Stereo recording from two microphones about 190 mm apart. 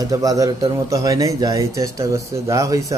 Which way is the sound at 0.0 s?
20° right (ahead or behind).